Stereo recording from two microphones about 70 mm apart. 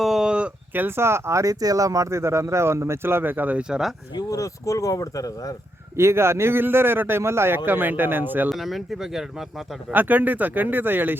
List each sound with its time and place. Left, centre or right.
0.0 s a sound: centre
0.7 s speech: right
3.6 s speech: centre
4.3 s speech: left
6.0 s speech: right
8.4 s speech: centre
9.9 s speech: right